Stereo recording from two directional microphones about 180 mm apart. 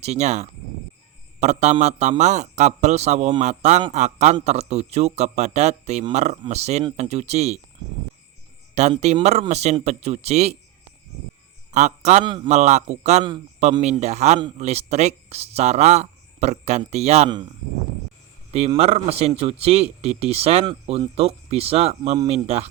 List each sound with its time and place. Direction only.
0.0 s a man's voice: 40° right (ahead or behind)
8.7 s speech: 40° right (ahead or behind)
11.7 s speech: 40° right (ahead or behind)
12.2 s a man's voice: 25° right (ahead or behind)
12.5 s speech: 40° right (ahead or behind)
17.2 s a man's voice: 25° right (ahead or behind)
18.5 s speech: 35° right (ahead or behind)